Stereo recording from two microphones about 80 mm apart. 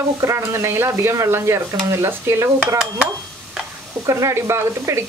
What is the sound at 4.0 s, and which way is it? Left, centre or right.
Speech, right.